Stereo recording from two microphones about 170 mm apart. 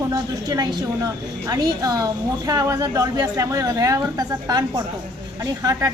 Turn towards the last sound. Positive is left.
turn(degrees=-20)  # may be behind; listen again after turning